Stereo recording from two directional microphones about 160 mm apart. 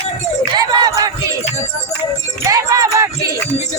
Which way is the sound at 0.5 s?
25° right (ahead or behind).